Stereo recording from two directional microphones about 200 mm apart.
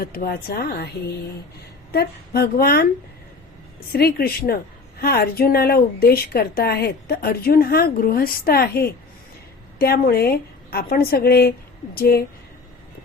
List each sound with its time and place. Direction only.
0.0 s a woman's voice: 50° left (ahead or behind)
1.9 s a woman's voice: 50° left (ahead or behind)
3.9 s a woman's voice: 50° left (ahead or behind)